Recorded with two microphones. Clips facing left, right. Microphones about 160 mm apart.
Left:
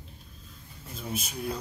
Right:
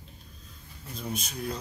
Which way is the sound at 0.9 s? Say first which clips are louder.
Even; 5° left (ahead or behind).